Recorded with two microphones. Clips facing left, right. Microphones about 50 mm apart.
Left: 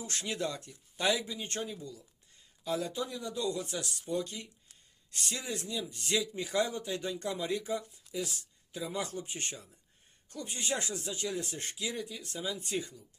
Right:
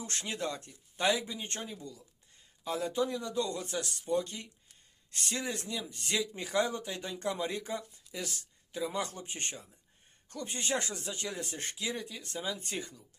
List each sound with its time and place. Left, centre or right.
0.0 s speech: right
1.8 s speech: right